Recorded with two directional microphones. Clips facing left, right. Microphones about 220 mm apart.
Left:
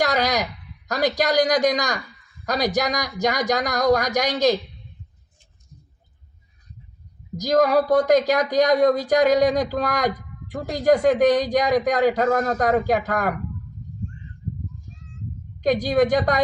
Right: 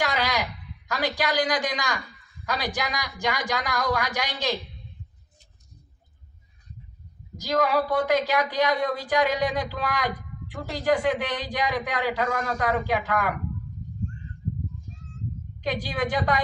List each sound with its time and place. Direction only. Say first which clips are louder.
0.0 s speech: left 5 dB; 40° left (ahead or behind)
7.3 s speech: left 6 dB; 40° left (ahead or behind)
15.6 s speech: left 9 dB; 45° left (ahead or behind)